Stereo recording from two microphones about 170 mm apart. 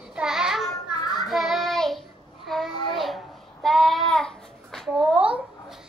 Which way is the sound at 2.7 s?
25° left (ahead or behind).